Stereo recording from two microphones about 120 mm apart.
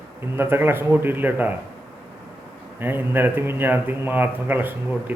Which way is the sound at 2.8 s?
15° right (ahead or behind).